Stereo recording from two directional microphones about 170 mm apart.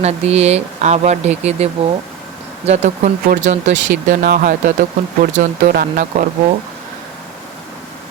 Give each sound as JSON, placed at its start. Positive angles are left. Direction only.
{"t": 0.0, "sound": "speech", "side_deg": -40}